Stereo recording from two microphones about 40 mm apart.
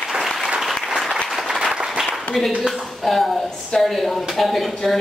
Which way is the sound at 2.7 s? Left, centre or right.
Centre.